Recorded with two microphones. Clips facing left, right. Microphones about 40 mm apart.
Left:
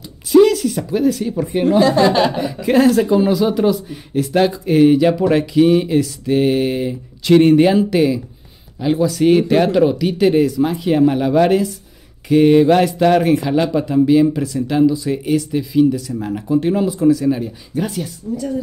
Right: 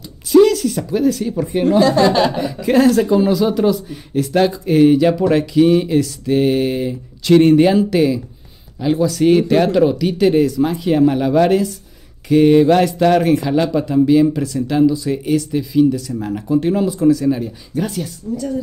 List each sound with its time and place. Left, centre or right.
0.3 s speech: centre